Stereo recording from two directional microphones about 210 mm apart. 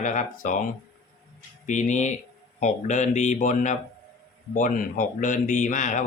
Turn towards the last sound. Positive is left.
turn(degrees=35)  # may be behind; listen again after turning